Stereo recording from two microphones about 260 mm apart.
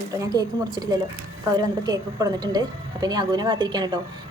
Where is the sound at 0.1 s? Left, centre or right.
Centre.